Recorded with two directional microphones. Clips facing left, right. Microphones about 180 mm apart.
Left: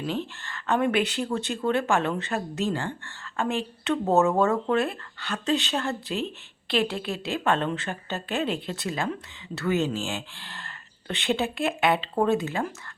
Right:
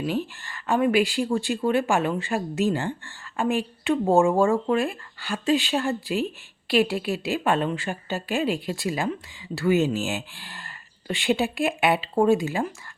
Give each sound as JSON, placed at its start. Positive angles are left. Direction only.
{"t": 0.0, "sound": "speech", "side_deg": -10}